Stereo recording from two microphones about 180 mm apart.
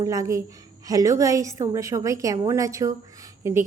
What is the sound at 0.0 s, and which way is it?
A woman's voice, 20° right (ahead or behind).